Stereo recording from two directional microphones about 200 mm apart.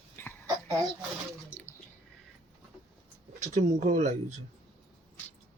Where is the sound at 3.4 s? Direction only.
35° right (ahead or behind).